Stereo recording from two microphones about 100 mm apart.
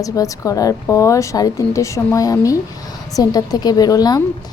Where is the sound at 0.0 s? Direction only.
35° left (ahead or behind).